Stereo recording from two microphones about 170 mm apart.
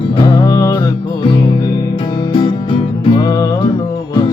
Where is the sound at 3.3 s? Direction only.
15° left (ahead or behind).